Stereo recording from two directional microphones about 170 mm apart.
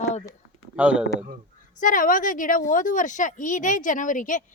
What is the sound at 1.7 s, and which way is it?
Speech, 50° left (ahead or behind).